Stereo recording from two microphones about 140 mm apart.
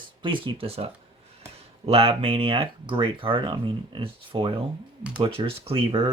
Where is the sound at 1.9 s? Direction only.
45° right (ahead or behind).